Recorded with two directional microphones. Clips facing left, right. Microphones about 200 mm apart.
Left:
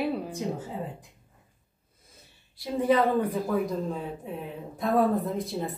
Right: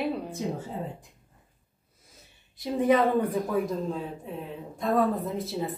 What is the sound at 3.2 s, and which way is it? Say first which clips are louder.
Speech: even; centre (ahead or behind).